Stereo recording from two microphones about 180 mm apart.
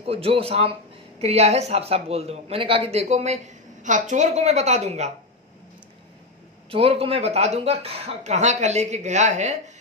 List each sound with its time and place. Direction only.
0.0 s speech: 30° right (ahead or behind)
6.7 s speech: 30° right (ahead or behind)